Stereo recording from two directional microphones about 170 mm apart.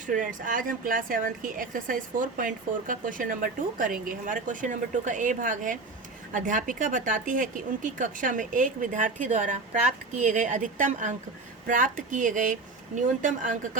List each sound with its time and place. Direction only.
0.0 s a woman's voice: 50° right (ahead or behind)